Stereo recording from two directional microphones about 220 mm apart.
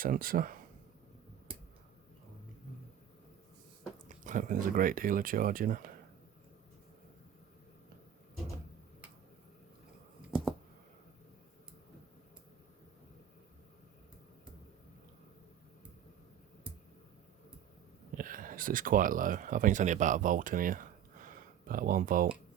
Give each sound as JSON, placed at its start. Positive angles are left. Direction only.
{"t": 0.0, "sound": "speech", "side_deg": -40}
{"t": 3.9, "sound": "speech", "side_deg": -35}
{"t": 18.1, "sound": "speech", "side_deg": -40}